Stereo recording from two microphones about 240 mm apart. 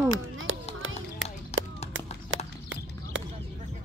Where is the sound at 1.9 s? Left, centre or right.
Right.